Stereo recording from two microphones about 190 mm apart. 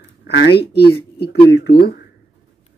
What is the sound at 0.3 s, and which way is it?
Speech, 60° left (ahead or behind).